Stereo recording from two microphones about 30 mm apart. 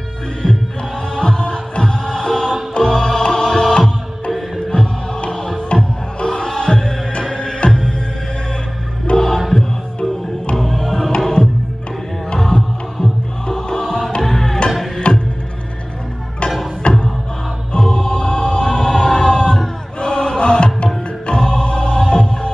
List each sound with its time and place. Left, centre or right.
1.1 s music: left
4.7 s music: left
5.3 s music: left
9.1 s music: centre
10.5 s music: centre
11.1 s music: left
12.5 s music: left
12.9 s music: centre
14.2 s music: centre
15.0 s music: left
16.8 s music: left
17.7 s music: left